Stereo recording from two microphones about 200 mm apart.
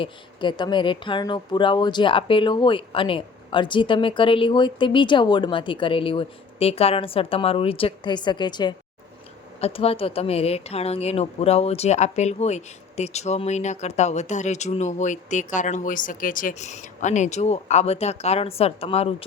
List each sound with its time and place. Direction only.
0.0 s speech: 25° left (ahead or behind)